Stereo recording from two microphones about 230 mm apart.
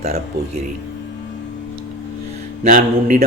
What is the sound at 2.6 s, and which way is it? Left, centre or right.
Speech, right.